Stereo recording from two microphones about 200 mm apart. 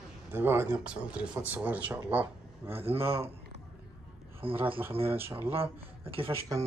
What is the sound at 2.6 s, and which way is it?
Speech, 30° right (ahead or behind).